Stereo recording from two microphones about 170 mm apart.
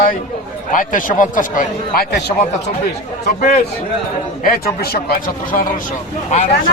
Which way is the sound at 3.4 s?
50° left (ahead or behind).